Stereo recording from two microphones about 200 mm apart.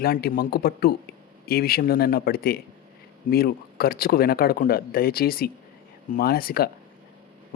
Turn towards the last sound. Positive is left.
turn(degrees=50)  # may be behind; listen again after turning